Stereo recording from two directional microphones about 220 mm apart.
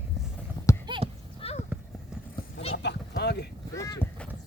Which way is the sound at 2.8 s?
50° left (ahead or behind).